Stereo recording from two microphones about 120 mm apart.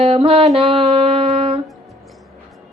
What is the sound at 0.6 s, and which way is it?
Music, 50° right (ahead or behind).